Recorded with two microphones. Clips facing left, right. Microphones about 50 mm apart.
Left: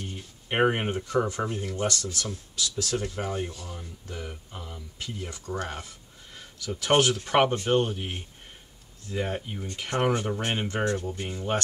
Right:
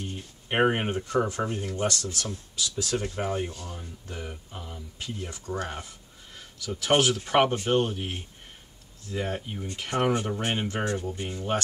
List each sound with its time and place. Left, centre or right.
0.5 s speech: centre
2.1 s speech: centre
2.8 s speech: centre
10.8 s speech: centre